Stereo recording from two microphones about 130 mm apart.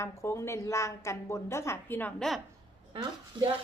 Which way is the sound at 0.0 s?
20° left (ahead or behind).